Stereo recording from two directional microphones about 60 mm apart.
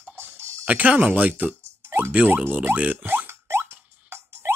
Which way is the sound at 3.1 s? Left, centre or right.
Right.